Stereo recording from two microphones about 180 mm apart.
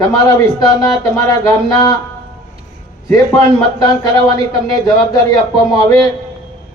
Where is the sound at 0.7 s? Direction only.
20° left (ahead or behind).